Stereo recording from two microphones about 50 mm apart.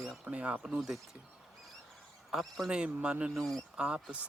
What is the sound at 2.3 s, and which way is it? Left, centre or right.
Speech, centre.